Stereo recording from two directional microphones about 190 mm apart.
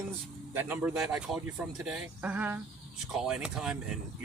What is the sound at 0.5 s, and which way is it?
Speech, 10° right (ahead or behind).